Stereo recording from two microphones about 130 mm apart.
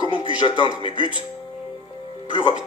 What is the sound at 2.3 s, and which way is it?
Speech, 40° left (ahead or behind).